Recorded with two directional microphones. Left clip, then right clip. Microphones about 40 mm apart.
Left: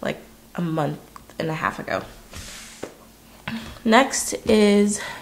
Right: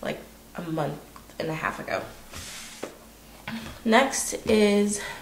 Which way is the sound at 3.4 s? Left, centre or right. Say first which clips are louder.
Left 4 dB; left.